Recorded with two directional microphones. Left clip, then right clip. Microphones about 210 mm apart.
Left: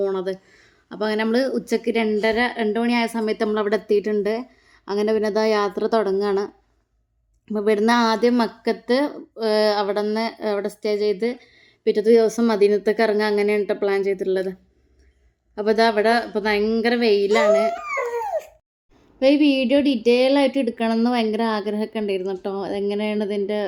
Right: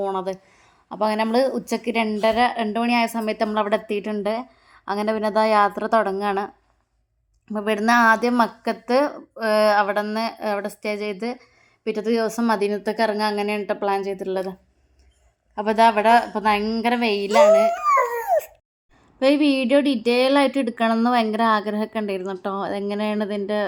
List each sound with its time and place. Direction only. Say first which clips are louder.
0.0 s speech: left 1 dB; centre (ahead or behind)
15.5 s speech: right 1 dB; 5° right (ahead or behind)
17.7 s a sound: right 6 dB; 45° right (ahead or behind)
19.2 s speech: left 1 dB; 15° right (ahead or behind)